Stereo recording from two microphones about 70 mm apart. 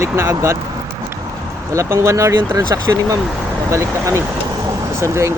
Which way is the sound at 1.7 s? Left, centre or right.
Right.